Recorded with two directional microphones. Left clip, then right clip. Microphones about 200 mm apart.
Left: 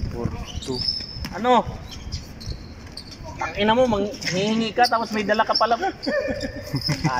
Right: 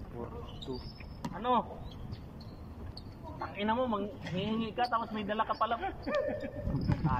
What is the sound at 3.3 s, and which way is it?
A man's voice, 45° left (ahead or behind).